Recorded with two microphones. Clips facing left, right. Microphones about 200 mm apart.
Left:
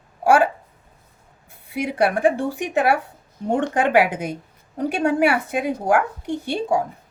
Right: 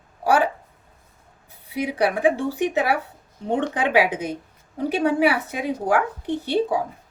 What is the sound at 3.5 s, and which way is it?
Speech, 50° left (ahead or behind).